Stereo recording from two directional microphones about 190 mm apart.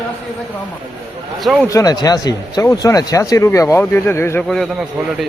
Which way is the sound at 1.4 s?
Centre (ahead or behind).